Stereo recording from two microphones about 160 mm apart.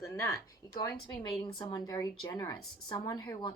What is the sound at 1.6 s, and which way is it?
Speech, 25° left (ahead or behind).